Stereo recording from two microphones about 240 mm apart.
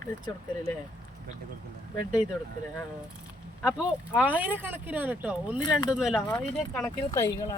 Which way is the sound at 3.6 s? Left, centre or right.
Centre.